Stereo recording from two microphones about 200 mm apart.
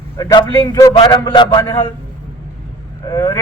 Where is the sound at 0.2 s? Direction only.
20° left (ahead or behind).